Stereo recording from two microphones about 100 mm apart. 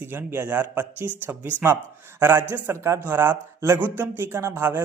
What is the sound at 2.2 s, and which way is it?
A man's voice, 20° right (ahead or behind).